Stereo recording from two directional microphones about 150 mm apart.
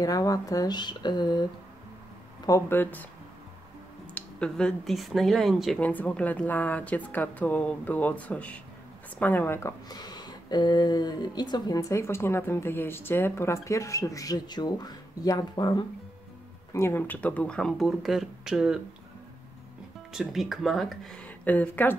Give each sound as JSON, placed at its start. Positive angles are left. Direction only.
{"t": 0.0, "sound": "speech", "side_deg": 25}
{"t": 2.4, "sound": "a woman's voice", "side_deg": 20}
{"t": 4.1, "sound": "speech", "side_deg": 5}
{"t": 5.8, "sound": "a woman's voice", "side_deg": 10}
{"t": 16.7, "sound": "speech", "side_deg": 15}
{"t": 20.1, "sound": "speech", "side_deg": 0}